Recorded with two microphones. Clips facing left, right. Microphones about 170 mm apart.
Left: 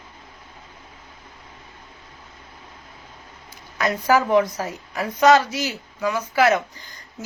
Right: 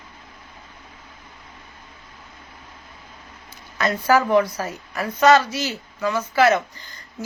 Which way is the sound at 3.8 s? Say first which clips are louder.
Right 1 dB; 15° left (ahead or behind).